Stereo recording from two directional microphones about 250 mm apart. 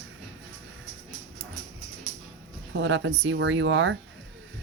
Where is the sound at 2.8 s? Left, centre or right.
Right.